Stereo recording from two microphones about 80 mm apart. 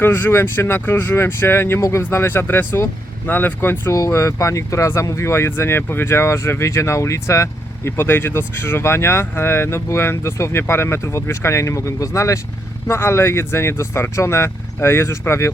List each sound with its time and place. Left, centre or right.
0.0 s speech: left
3.9 s speech: left